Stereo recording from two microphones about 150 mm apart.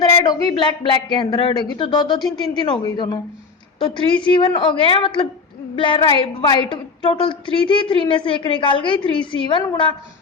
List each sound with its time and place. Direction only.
0.0 s a woman's voice: 25° left (ahead or behind)